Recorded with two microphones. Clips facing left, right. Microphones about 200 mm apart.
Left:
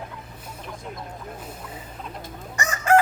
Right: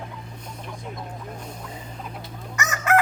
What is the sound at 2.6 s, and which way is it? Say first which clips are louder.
Chicken: left 3 dB; 30° left (ahead or behind).